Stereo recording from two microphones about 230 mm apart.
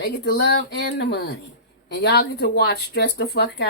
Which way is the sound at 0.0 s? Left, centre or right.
Left.